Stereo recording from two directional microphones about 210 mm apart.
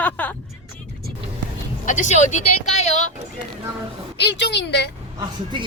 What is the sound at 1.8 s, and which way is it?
Speech, 35° left (ahead or behind).